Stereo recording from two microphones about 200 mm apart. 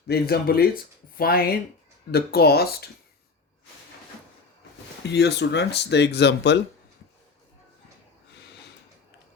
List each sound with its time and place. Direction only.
0.1 s speech: 50° left (ahead or behind)
5.0 s speech: 60° left (ahead or behind)